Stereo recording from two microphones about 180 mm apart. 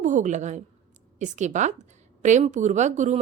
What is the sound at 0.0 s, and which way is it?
A woman's voice, 45° right (ahead or behind).